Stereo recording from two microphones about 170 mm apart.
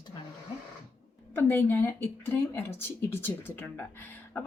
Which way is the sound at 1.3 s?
15° left (ahead or behind).